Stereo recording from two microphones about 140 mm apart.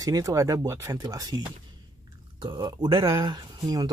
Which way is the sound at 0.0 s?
25° right (ahead or behind).